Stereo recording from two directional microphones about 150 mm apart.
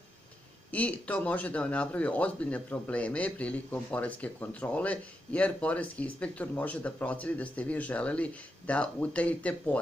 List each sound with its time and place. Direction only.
0.7 s a man's voice: 10° left (ahead or behind)